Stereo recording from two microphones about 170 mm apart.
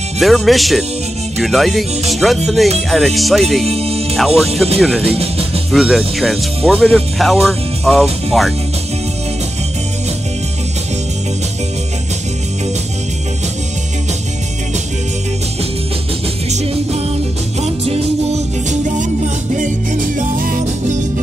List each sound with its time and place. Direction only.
0.2 s speech: centre (ahead or behind)
3.6 s music: 35° right (ahead or behind)
4.7 s speech: centre (ahead or behind)
5.0 s speech: 35° right (ahead or behind)
5.7 s speech: centre (ahead or behind)
16.4 s music: 40° right (ahead or behind); by 21.0 s 55° right (ahead or behind)